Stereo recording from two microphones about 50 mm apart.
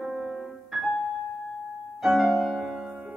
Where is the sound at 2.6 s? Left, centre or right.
Centre.